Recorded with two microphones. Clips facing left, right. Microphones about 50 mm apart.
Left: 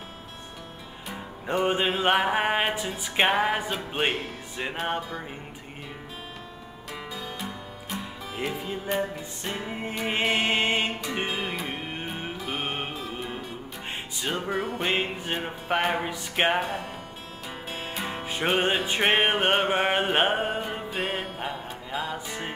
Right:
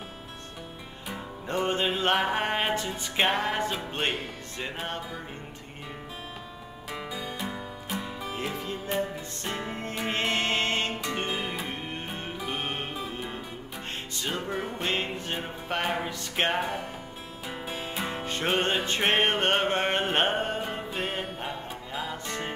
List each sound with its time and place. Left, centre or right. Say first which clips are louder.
1.0 s music: left 1 dB; centre
6.9 s music: right 1 dB; centre
8.4 s music: left 5 dB; centre
11.6 s music: left 2 dB; centre
17.6 s music: even; centre